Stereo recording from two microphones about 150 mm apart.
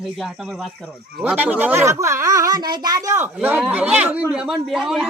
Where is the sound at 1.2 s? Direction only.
10° right (ahead or behind).